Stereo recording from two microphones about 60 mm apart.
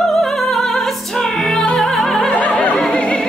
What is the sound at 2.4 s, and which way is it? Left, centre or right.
Opera, left.